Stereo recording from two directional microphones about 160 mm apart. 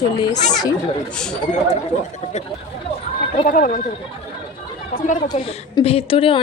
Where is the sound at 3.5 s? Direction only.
55° left (ahead or behind).